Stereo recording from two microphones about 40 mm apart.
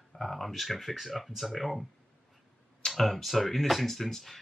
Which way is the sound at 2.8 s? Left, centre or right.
Centre.